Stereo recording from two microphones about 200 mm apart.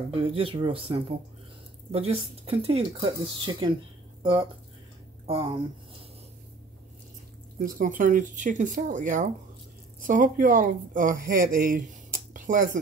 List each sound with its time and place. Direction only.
0.1 s speech: 30° right (ahead or behind)
7.5 s speech: 45° right (ahead or behind)